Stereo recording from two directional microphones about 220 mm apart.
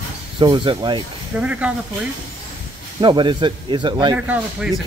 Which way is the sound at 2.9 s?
20° right (ahead or behind).